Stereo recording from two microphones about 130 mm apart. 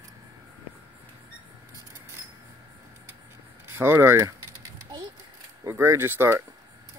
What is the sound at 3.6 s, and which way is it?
Speech, 20° right (ahead or behind).